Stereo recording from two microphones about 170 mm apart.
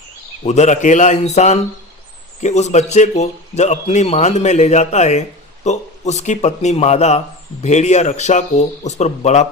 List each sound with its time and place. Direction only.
0.4 s a man's voice: 45° left (ahead or behind)